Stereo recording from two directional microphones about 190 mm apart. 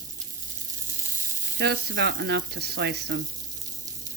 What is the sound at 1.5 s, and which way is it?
Speech, 65° right (ahead or behind).